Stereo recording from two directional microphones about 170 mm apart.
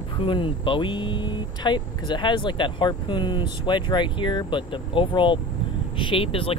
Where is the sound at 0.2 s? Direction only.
30° left (ahead or behind).